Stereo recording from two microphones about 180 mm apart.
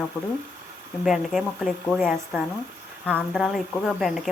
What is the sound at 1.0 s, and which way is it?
Speech, centre (ahead or behind).